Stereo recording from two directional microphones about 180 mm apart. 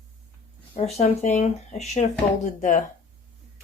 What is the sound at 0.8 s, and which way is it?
Speech, 35° left (ahead or behind).